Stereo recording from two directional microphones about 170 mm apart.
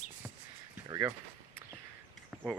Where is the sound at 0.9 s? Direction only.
15° right (ahead or behind).